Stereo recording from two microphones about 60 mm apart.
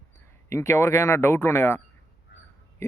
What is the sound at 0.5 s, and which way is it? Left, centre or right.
A man's voice, left.